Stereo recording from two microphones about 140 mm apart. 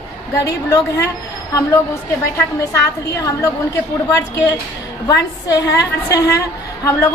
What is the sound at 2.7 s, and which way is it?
A woman's voice, 25° left (ahead or behind).